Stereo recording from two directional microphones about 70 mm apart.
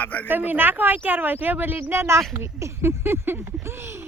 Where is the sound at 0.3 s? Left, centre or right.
Right.